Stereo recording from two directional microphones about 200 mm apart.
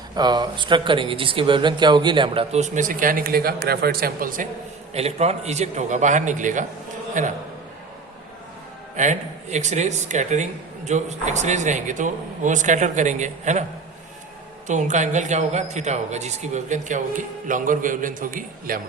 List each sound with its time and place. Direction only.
0.2 s speech: 20° right (ahead or behind); by 4.4 s 45° right (ahead or behind)
4.9 s a man's voice: 30° right (ahead or behind)
9.0 s a man's voice: 35° right (ahead or behind)
14.7 s a man's voice: 35° right (ahead or behind)